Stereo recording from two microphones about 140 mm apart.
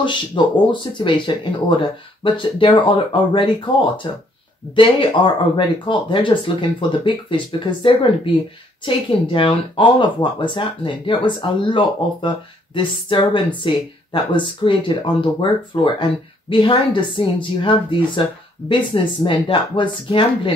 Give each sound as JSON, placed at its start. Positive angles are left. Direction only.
{"t": 0.0, "sound": "speech", "side_deg": 35}